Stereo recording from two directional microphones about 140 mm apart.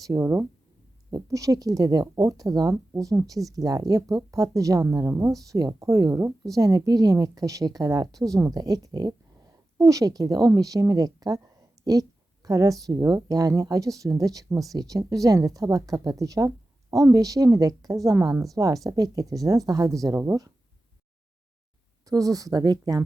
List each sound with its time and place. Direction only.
0.0 s speech: 20° right (ahead or behind)
22.0 s speech: 25° right (ahead or behind)